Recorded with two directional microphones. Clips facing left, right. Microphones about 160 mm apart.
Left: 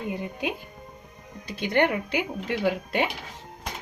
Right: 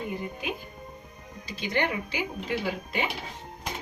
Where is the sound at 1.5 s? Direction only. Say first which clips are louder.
Left 5 dB; 55° left (ahead or behind).